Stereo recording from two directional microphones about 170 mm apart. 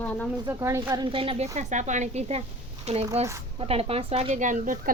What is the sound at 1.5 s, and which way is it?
Speech, 45° right (ahead or behind).